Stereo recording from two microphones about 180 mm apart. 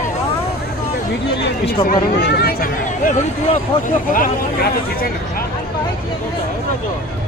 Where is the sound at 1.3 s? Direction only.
70° left (ahead or behind).